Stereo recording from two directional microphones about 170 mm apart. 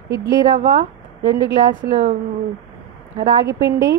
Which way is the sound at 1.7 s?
55° right (ahead or behind).